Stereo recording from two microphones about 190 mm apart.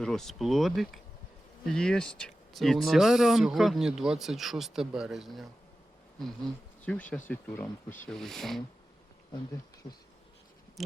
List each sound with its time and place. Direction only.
0.0 s speech: centre (ahead or behind)
10.8 s speech: centre (ahead or behind)